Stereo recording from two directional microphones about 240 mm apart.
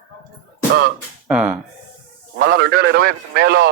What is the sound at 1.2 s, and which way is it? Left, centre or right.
Speech, centre.